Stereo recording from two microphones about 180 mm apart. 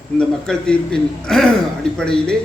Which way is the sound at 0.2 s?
5° left (ahead or behind).